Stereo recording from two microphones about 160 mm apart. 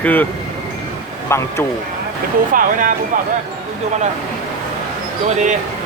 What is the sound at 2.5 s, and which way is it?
Speech, 60° right (ahead or behind).